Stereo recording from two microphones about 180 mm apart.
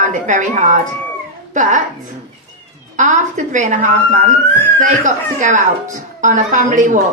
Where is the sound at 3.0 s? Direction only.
45° right (ahead or behind).